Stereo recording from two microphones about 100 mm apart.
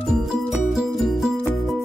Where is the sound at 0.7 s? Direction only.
Centre (ahead or behind).